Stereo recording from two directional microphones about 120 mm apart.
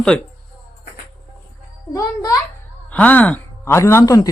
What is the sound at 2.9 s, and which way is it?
Speech, 10° left (ahead or behind).